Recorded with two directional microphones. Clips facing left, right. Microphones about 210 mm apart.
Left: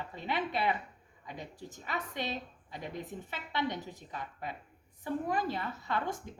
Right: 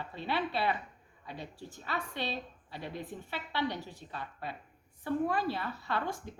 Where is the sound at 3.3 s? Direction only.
20° left (ahead or behind).